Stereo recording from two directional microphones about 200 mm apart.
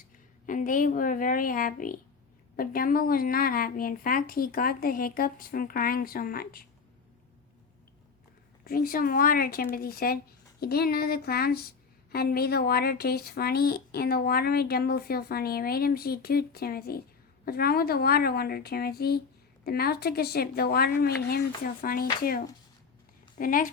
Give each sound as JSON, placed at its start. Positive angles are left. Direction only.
{"t": 0.4, "sound": "speech", "side_deg": 40}
{"t": 8.6, "sound": "speech", "side_deg": 45}